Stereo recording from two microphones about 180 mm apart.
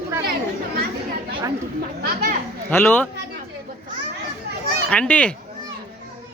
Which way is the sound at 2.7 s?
10° left (ahead or behind).